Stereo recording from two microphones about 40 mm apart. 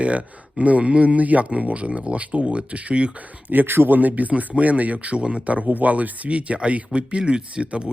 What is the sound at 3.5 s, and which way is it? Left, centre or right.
Speech, right.